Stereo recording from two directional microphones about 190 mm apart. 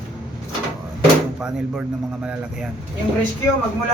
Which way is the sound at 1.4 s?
5° right (ahead or behind).